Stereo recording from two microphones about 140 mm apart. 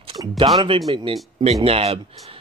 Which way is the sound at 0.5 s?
40° right (ahead or behind).